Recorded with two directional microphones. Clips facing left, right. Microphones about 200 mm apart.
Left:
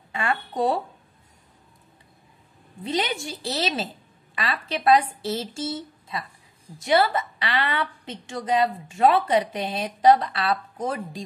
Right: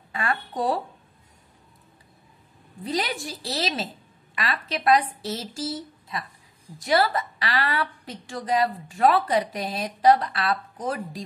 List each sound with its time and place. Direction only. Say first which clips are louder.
0.1 s speech: left 1 dB; 25° left (ahead or behind)
2.8 s a woman's voice: left 1 dB; 25° left (ahead or behind)